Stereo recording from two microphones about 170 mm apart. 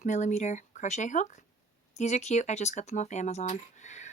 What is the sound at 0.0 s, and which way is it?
Speech, 45° left (ahead or behind).